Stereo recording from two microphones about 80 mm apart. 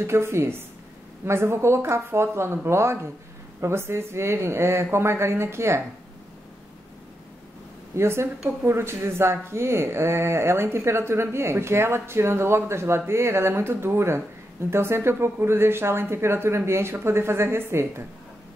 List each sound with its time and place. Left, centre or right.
0.0 s speech: right
7.9 s speech: right